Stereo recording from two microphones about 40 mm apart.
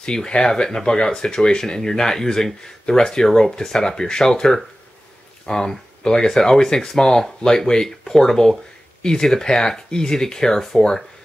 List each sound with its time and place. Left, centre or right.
0.0 s speech: left